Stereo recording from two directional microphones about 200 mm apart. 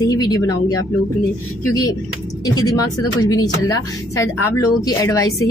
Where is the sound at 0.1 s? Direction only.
20° left (ahead or behind).